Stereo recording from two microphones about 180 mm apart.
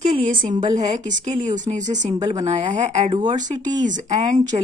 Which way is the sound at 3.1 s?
25° right (ahead or behind).